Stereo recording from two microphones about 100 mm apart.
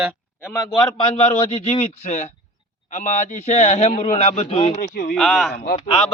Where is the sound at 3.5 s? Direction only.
90° left.